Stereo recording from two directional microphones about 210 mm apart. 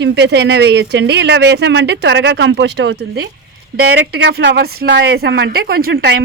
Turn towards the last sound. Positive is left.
turn(degrees=-50)  # may be behind; listen again after turning